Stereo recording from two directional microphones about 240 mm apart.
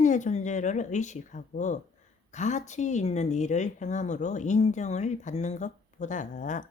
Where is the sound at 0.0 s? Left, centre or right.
Left.